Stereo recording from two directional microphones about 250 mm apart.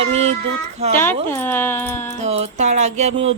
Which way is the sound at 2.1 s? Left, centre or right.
Right.